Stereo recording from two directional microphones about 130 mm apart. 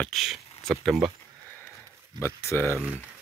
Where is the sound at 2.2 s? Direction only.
20° left (ahead or behind).